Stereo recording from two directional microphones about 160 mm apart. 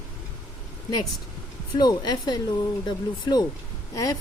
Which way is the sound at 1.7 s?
25° left (ahead or behind).